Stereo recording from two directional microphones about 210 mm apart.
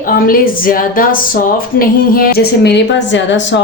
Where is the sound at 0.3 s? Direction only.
45° left (ahead or behind).